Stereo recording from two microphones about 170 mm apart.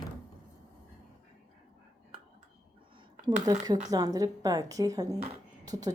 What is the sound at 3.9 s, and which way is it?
A woman's voice, 20° right (ahead or behind).